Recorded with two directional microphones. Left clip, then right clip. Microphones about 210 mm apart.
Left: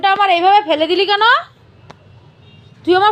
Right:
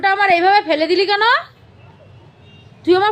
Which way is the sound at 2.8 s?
Centre (ahead or behind).